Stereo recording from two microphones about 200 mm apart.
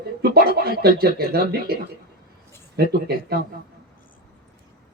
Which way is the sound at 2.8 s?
55° right (ahead or behind).